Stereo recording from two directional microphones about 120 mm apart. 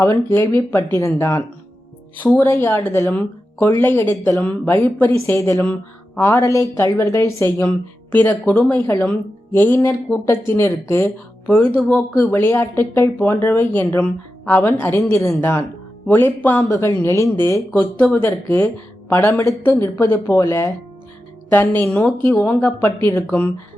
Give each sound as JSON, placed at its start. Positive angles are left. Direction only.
{"t": 0.0, "sound": "speech", "side_deg": 20}